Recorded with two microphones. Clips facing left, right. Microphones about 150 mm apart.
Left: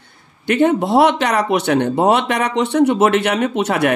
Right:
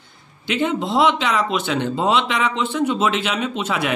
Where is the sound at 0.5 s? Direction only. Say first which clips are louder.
Left 7 dB; 55° left (ahead or behind).